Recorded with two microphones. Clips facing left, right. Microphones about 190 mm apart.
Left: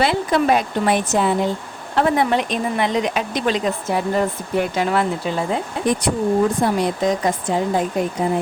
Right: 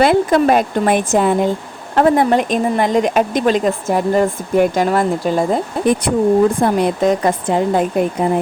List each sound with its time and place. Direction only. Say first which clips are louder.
0.0 s speech: right 6 dB; 50° right (ahead or behind)
6.6 s speech: right 4 dB; 55° right (ahead or behind)